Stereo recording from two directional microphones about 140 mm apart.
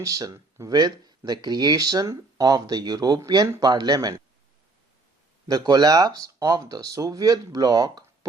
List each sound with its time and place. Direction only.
0.0 s speech: 25° right (ahead or behind)
5.5 s speech: 30° right (ahead or behind)